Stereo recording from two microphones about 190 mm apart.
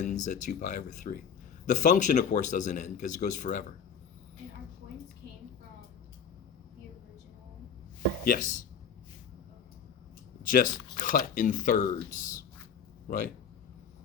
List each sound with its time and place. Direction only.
0.0 s speech: 40° left (ahead or behind)
8.2 s speech: 45° left (ahead or behind)
10.4 s speech: 45° left (ahead or behind)